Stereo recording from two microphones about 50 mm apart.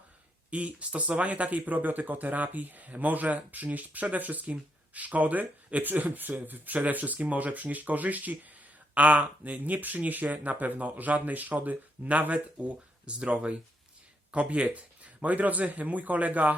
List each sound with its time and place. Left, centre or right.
0.5 s speech: right